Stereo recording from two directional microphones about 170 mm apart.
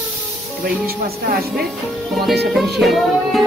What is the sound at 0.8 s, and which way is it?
Speech, 65° right (ahead or behind).